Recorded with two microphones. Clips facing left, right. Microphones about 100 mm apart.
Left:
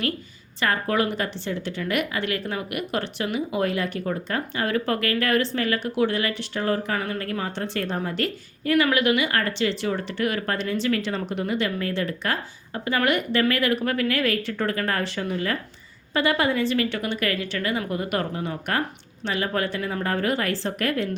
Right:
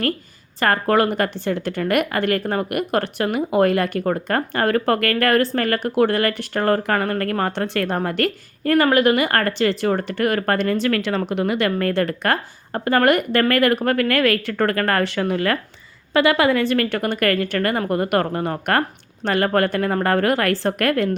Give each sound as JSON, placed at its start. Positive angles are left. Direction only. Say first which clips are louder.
{"t": 0.6, "sound": "a woman's voice", "louder": "right 6 dB", "side_deg": -55}
{"t": 16.1, "sound": "a woman's voice", "louder": "right 6 dB", "side_deg": -85}